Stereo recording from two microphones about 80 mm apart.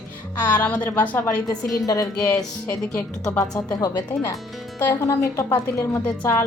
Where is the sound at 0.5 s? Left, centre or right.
Centre.